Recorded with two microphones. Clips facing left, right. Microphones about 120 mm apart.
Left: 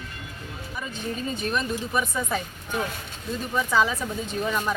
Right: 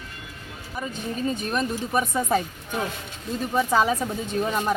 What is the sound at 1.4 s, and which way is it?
Speech, 40° right (ahead or behind).